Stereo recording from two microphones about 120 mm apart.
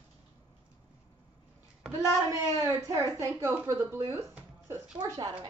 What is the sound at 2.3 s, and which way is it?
A woman's voice, 25° right (ahead or behind).